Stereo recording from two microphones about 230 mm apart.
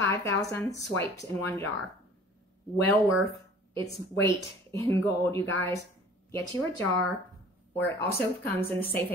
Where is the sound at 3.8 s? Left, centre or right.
Centre.